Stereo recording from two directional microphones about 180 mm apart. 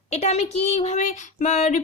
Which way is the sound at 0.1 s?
35° left (ahead or behind).